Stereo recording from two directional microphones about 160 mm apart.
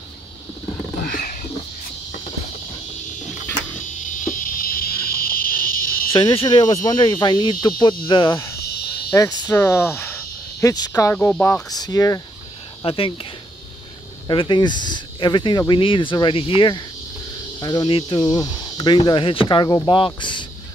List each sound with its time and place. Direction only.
1.0 s a sound: 55° left (ahead or behind)
4.0 s a sound: 55° left (ahead or behind)
6.1 s speech: 30° left (ahead or behind)
8.5 s cricket: 90° left
9.1 s speech: 20° left (ahead or behind)
11.1 s speech: 10° left (ahead or behind)
11.7 s speech: 25° left (ahead or behind)
12.8 s speech: 35° left (ahead or behind)